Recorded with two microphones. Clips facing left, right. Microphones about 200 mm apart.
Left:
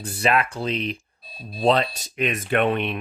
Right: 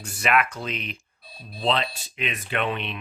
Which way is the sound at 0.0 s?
30° left (ahead or behind).